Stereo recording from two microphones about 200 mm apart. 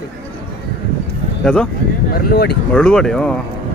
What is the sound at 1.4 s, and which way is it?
Speech, 5° left (ahead or behind).